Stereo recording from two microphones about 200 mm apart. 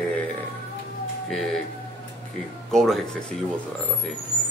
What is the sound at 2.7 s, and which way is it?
Speech, centre (ahead or behind).